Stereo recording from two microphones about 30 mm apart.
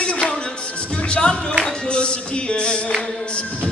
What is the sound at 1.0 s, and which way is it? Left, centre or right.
Music, left.